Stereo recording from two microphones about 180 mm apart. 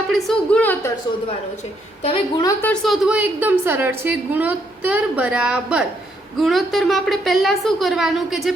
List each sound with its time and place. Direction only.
0.1 s a woman's voice: 5° left (ahead or behind)
2.0 s a woman's voice: 25° left (ahead or behind)
2.8 s a woman's voice: centre (ahead or behind)